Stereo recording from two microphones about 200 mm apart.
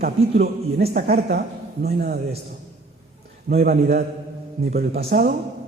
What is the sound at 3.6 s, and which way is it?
A man's voice, 50° right (ahead or behind).